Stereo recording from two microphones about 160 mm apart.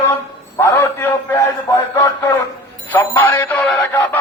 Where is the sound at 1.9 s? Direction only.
20° left (ahead or behind).